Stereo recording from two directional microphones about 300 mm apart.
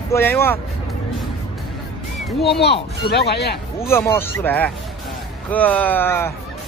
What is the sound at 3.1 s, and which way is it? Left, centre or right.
Speech, left.